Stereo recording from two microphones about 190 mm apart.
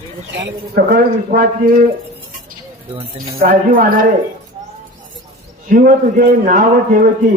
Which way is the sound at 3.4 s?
50° right (ahead or behind).